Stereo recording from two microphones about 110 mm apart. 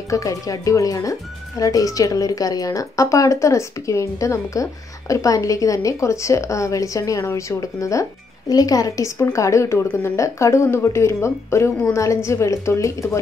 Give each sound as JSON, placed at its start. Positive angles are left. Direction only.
{"t": 0.1, "sound": "a woman's voice", "side_deg": 30}